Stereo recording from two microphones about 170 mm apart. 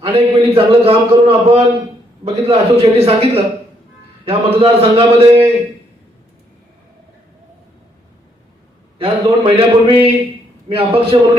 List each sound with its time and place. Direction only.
0.0 s a man's voice: 35° right (ahead or behind)
9.0 s a man's voice: 30° right (ahead or behind)